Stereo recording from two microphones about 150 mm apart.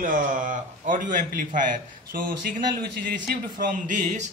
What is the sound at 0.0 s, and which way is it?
A man's voice, 65° right (ahead or behind).